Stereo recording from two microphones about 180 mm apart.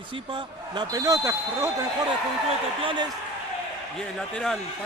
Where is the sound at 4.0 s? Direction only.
5° left (ahead or behind).